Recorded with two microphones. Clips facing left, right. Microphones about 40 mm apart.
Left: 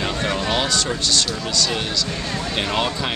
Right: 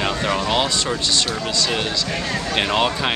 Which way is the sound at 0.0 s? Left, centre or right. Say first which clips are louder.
Right 2 dB; centre.